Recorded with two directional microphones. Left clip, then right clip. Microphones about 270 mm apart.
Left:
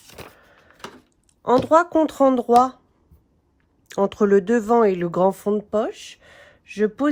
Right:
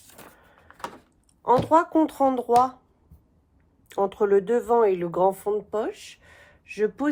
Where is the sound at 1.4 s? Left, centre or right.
Left.